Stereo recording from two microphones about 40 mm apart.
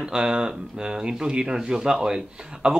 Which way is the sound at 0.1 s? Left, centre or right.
Centre.